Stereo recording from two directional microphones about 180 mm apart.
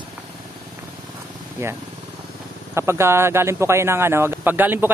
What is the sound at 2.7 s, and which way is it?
Speech, 15° right (ahead or behind).